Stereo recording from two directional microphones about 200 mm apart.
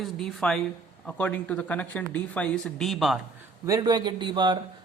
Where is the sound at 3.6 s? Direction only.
20° right (ahead or behind).